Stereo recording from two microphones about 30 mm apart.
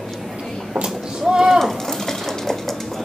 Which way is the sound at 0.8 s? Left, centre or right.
Right.